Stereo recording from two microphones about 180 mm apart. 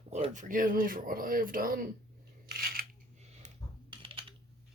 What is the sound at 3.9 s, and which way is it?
Typing, 30° right (ahead or behind).